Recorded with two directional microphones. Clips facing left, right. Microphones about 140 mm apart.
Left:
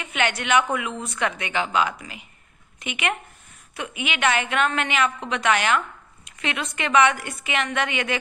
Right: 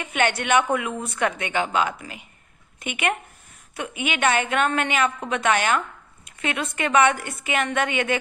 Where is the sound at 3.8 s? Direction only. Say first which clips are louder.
Right 2 dB; 35° right (ahead or behind).